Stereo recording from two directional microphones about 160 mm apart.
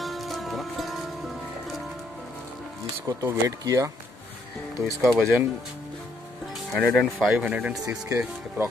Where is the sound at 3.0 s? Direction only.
20° right (ahead or behind).